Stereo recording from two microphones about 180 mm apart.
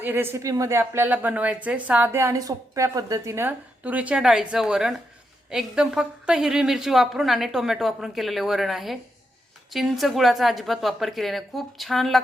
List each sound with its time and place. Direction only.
0.0 s a woman's voice: 10° right (ahead or behind)